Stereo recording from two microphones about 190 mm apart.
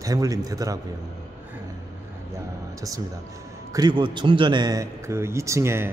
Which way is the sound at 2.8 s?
20° right (ahead or behind).